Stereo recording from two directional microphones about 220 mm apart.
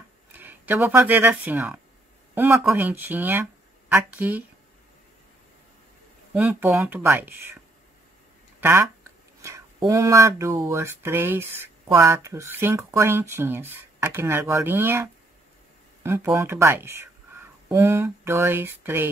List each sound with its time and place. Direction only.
0.3 s speech: 10° right (ahead or behind)
6.3 s speech: 10° right (ahead or behind)